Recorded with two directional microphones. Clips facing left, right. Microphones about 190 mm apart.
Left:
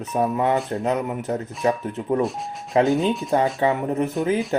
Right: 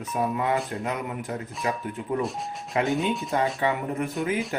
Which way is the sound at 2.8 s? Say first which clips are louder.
Left 6 dB; centre (ahead or behind).